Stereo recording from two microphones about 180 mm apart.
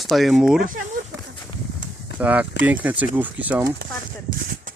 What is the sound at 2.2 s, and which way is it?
Speech, 10° right (ahead or behind).